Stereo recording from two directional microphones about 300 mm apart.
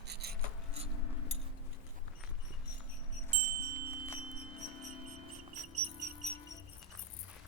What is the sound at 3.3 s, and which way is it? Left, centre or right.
Music, right.